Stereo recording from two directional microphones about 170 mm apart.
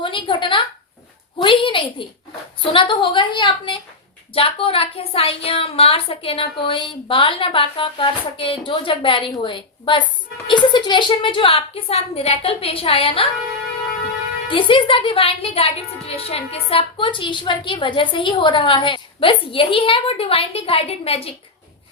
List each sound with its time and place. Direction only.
0.0 s a woman's voice: 30° left (ahead or behind)
14.5 s a woman's voice: 30° left (ahead or behind)